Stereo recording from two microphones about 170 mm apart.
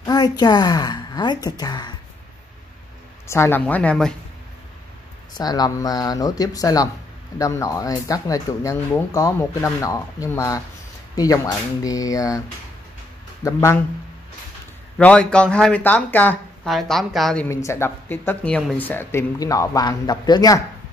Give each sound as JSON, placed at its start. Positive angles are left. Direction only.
{"t": 0.0, "sound": "a woman's voice", "side_deg": 20}
{"t": 3.3, "sound": "speech", "side_deg": 15}
{"t": 5.3, "sound": "speech", "side_deg": 25}
{"t": 13.4, "sound": "speech", "side_deg": 20}
{"t": 15.0, "sound": "speech", "side_deg": 5}
{"t": 17.5, "sound": "speech", "side_deg": 15}